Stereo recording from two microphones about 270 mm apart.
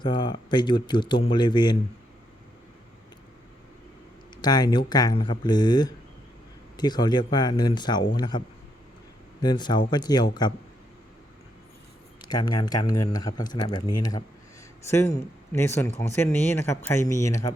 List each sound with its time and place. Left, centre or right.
0.0 s speech: centre
4.4 s speech: centre
12.2 s speech: centre